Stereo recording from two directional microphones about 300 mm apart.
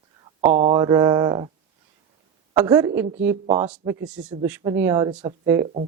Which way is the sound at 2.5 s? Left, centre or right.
Centre.